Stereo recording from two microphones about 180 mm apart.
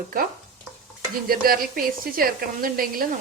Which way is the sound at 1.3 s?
55° right (ahead or behind).